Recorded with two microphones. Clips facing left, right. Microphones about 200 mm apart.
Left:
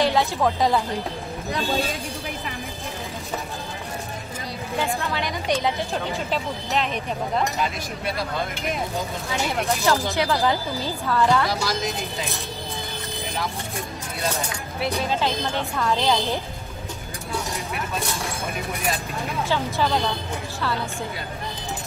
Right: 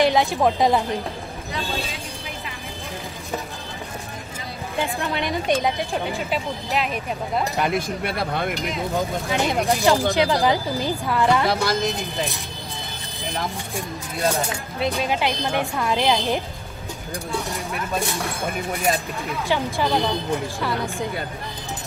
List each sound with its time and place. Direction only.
0.0 s a woman's voice: 15° right (ahead or behind)
4.7 s speech: 20° right (ahead or behind)
6.3 s a woman's voice: 5° right (ahead or behind)
7.5 s speech: 55° right (ahead or behind)
9.3 s a woman's voice: 15° right (ahead or behind)
11.6 s speech: 55° right (ahead or behind)
15.0 s a woman's voice: 15° right (ahead or behind)
19.5 s a woman's voice: 15° right (ahead or behind)